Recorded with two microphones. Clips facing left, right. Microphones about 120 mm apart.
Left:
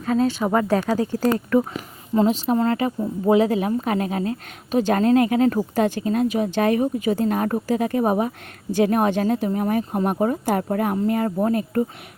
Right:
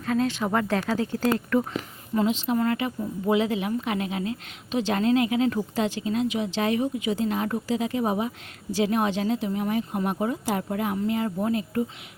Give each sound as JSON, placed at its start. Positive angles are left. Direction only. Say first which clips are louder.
{"t": 0.0, "sound": "speech", "louder": "left 4 dB", "side_deg": 30}